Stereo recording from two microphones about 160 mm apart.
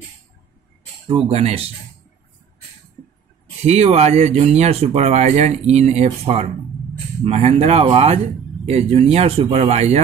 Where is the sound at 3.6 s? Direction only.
40° right (ahead or behind).